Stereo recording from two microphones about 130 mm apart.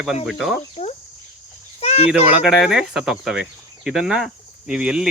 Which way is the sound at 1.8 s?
55° left (ahead or behind).